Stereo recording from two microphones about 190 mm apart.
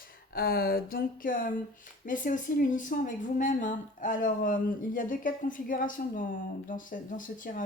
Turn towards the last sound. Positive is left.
turn(degrees=45)  # may be behind; listen again after turning